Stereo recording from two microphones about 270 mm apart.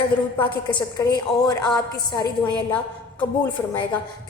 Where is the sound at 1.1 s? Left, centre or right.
Centre.